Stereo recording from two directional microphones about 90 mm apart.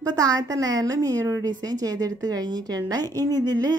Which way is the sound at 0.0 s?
40° right (ahead or behind).